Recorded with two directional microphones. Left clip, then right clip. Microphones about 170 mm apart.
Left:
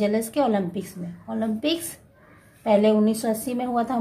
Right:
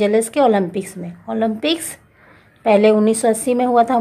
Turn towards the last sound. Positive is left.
turn(degrees=-15)  # may be behind; listen again after turning